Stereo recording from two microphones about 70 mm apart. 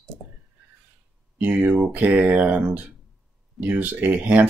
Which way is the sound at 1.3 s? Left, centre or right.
Right.